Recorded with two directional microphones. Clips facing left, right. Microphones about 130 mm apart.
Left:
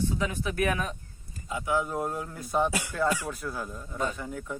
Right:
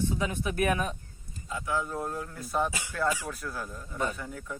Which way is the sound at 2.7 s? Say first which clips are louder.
Left 7 dB; 60° left (ahead or behind).